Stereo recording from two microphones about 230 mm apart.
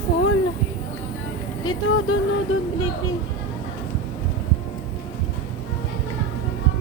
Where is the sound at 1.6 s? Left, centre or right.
Left.